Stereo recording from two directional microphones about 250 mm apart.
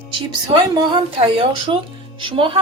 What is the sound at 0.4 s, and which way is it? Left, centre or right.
A woman's voice, centre.